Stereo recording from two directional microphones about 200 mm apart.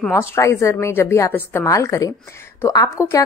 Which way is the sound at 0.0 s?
15° left (ahead or behind).